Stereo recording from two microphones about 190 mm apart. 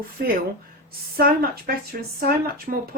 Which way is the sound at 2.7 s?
45° right (ahead or behind).